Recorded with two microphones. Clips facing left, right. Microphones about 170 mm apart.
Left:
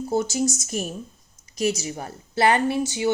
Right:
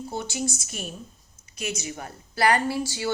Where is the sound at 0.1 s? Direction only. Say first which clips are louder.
Left 8 dB; 40° left (ahead or behind).